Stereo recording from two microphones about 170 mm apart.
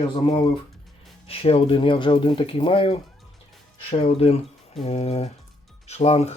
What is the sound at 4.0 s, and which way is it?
Speech, 35° left (ahead or behind).